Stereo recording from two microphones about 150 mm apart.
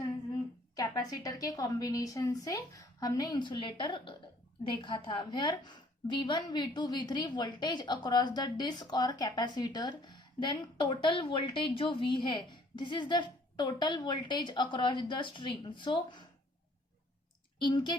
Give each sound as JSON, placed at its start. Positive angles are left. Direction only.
{"t": 0.8, "sound": "a woman's voice", "side_deg": 25}
{"t": 17.6, "sound": "a woman's voice", "side_deg": 30}